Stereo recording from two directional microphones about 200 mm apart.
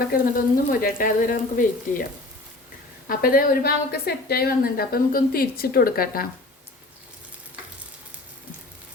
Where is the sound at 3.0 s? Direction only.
45° left (ahead or behind).